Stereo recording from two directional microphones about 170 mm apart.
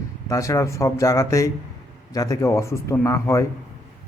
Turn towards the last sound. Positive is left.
turn(degrees=15)  # may be behind; listen again after turning